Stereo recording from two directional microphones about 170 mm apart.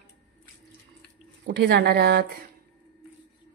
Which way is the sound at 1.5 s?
75° right (ahead or behind).